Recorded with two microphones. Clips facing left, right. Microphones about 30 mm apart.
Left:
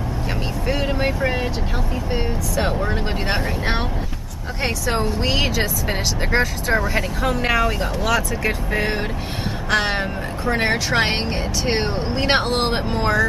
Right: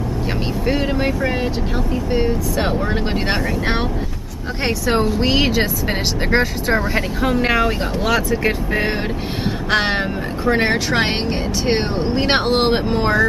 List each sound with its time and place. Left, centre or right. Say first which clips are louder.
0.7 s speech: right 2 dB; centre
4.6 s speech: right 4 dB; centre